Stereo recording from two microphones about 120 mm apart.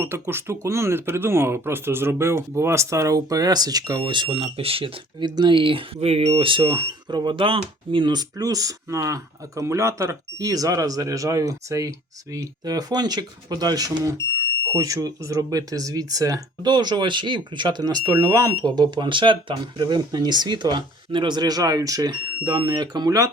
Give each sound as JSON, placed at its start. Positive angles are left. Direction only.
{"t": 0.0, "sound": "speech", "side_deg": -20}
{"t": 5.3, "sound": "speech", "side_deg": -40}